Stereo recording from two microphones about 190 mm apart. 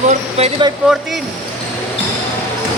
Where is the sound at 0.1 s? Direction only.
35° right (ahead or behind).